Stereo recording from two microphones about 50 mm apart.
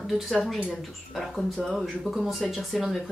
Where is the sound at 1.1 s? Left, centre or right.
Centre.